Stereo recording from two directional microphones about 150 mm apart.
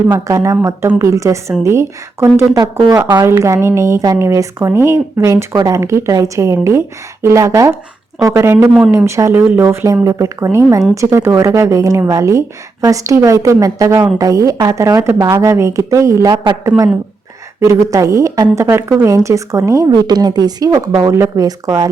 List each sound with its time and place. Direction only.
0.1 s a woman's voice: 20° right (ahead or behind)